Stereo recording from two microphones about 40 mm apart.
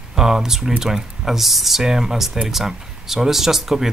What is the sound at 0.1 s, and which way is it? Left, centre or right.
Speech, centre.